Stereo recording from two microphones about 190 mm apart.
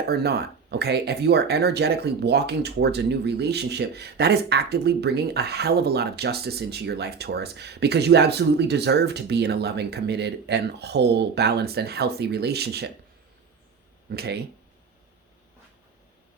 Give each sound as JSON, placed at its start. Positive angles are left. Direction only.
{"t": 0.1, "sound": "speech", "side_deg": -55}
{"t": 14.1, "sound": "speech", "side_deg": -55}